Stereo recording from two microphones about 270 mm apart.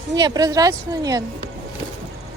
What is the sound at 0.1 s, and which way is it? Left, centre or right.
A woman's voice, centre.